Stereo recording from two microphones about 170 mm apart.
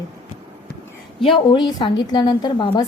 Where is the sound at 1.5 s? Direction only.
25° left (ahead or behind).